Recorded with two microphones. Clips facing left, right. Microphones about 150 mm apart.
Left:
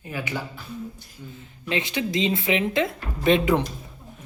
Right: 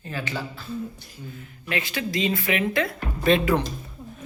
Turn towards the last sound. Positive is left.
turn(degrees=20)  # may be behind; listen again after turning